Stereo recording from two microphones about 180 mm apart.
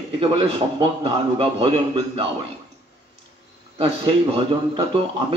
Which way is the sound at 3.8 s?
30° right (ahead or behind).